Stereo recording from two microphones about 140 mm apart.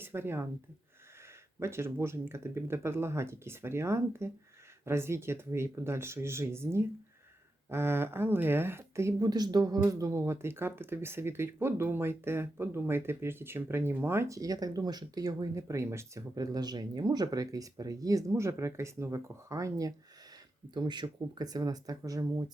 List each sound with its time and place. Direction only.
0.0 s speech: 15° right (ahead or behind)
1.5 s speech: 20° right (ahead or behind)